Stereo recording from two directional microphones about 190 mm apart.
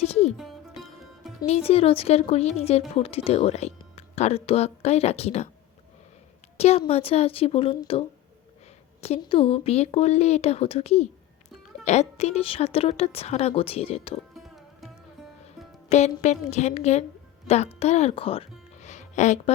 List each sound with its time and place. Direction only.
0.0 s speech: 35° left (ahead or behind)
0.3 s music: centre (ahead or behind)
1.5 s speech: 30° left (ahead or behind)
6.6 s a woman's voice: 30° left (ahead or behind)
14.3 s music: centre (ahead or behind)
15.9 s a woman's voice: 35° left (ahead or behind)